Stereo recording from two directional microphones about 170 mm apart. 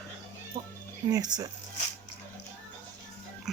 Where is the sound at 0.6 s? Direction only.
30° right (ahead or behind).